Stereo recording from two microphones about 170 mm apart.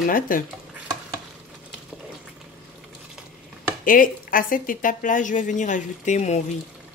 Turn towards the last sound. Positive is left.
turn(degrees=40)  # may be behind; listen again after turning